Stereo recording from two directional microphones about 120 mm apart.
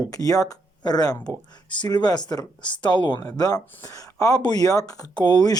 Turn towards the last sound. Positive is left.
turn(degrees=35)  # may be behind; listen again after turning